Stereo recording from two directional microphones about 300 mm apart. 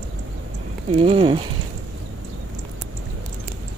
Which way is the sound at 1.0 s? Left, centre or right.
Centre.